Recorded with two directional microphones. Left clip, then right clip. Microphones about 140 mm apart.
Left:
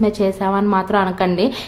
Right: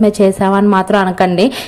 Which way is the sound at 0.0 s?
45° right (ahead or behind).